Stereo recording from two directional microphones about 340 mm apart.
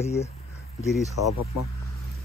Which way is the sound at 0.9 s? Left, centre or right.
Centre.